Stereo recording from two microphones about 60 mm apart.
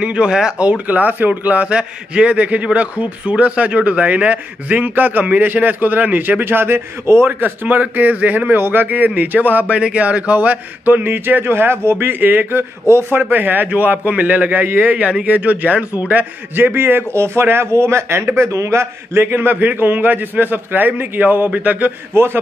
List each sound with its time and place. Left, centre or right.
0.0 s speech: centre
0.7 s a man's voice: right
7.2 s a man's voice: right
13.1 s a man's voice: right
22.1 s a man's voice: right